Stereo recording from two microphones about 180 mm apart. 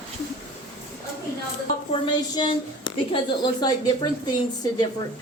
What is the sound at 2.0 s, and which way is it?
Speech, 25° left (ahead or behind).